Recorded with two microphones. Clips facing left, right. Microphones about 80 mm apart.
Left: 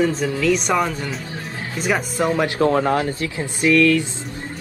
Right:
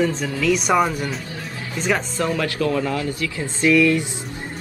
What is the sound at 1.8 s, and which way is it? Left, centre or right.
Speech, centre.